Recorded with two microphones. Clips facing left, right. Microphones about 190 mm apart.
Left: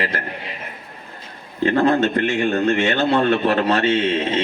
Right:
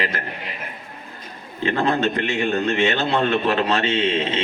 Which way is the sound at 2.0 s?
50° left (ahead or behind).